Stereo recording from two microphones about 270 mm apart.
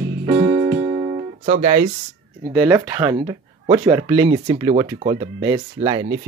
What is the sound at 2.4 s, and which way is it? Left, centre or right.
Speech, centre.